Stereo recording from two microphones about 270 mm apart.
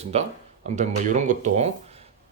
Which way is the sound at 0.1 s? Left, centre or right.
Right.